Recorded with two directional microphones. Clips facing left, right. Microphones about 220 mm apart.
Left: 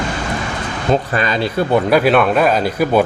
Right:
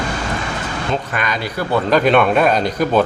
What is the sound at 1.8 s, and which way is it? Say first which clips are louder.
Speech: right 2 dB; 10° left (ahead or behind).